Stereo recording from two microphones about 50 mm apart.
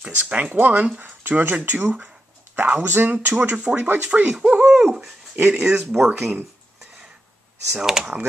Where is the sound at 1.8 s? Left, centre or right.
Right.